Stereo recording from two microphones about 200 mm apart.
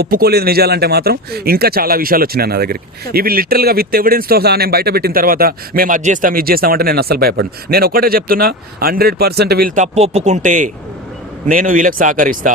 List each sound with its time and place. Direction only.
0.0 s a man's voice: 50° right (ahead or behind)